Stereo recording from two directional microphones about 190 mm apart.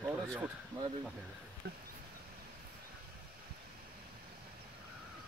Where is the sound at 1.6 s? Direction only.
55° right (ahead or behind).